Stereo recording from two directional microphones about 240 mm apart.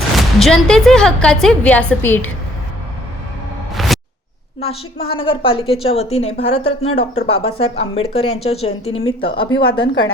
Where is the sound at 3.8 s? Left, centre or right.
Centre.